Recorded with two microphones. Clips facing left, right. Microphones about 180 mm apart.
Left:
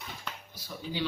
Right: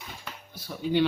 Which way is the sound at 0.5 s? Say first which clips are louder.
Right 12 dB; 60° right (ahead or behind).